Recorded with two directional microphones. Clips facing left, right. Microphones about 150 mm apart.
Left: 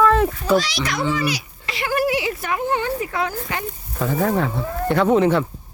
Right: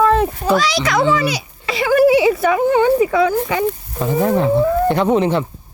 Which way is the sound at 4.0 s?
20° right (ahead or behind).